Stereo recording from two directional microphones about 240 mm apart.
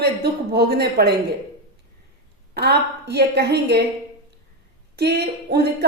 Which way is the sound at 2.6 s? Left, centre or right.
Right.